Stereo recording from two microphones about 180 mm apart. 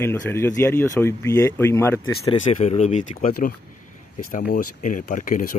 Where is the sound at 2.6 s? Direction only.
40° left (ahead or behind).